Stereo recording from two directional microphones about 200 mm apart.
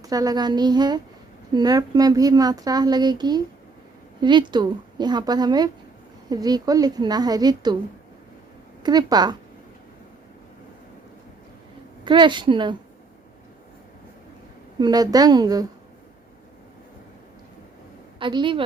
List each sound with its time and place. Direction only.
0.0 s speech: 20° right (ahead or behind)
8.8 s speech: 20° right (ahead or behind)
12.0 s speech: 25° right (ahead or behind)
14.8 s speech: 20° right (ahead or behind)
18.2 s a woman's voice: 25° right (ahead or behind)